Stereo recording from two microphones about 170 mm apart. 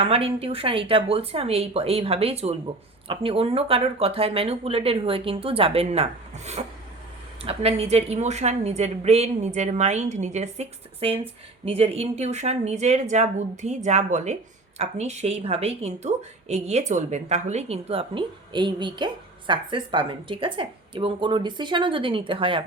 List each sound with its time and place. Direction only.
0.0 s speech: 35° right (ahead or behind)